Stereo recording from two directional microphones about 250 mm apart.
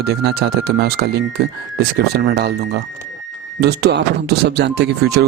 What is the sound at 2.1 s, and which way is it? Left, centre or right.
Speech, right.